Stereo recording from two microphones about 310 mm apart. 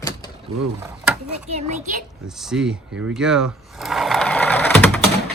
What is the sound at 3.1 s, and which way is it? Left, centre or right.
Sewing machine, centre.